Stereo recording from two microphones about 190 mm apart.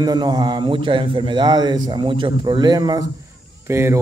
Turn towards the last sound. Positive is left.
turn(degrees=-15)  # may be behind; listen again after turning